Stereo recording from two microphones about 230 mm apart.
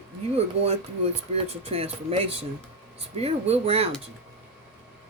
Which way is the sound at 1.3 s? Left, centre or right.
Right.